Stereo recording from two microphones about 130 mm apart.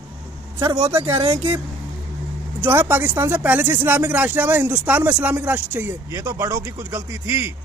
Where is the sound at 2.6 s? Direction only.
15° right (ahead or behind).